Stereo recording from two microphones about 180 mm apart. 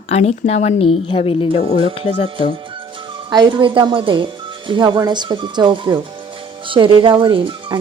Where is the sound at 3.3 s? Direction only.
25° right (ahead or behind).